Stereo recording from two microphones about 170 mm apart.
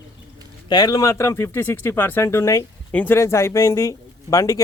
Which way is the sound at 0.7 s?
20° left (ahead or behind).